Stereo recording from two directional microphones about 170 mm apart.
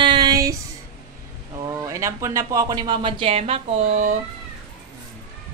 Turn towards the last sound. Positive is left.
turn(degrees=-40)  # may be behind; listen again after turning